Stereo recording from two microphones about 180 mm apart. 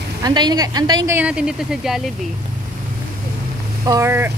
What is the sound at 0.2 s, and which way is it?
Speech, 25° right (ahead or behind).